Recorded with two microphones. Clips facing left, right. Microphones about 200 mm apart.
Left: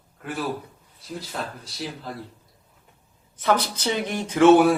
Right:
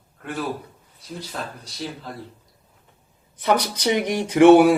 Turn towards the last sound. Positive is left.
turn(degrees=-15)  # may be behind; listen again after turning